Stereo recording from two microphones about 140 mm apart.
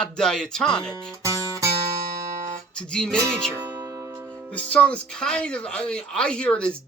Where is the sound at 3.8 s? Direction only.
20° right (ahead or behind).